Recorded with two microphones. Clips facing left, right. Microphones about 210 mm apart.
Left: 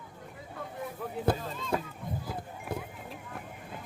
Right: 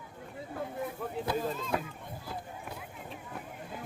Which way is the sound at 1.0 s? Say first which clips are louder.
Even; centre (ahead or behind).